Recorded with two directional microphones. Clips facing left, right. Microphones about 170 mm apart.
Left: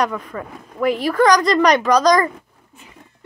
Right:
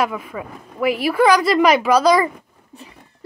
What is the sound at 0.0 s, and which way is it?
Speech, 5° right (ahead or behind).